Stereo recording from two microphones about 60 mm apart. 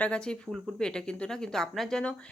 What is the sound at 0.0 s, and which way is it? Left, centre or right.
Speech, centre.